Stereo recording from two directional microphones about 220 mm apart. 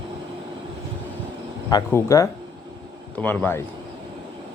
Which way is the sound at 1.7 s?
15° left (ahead or behind).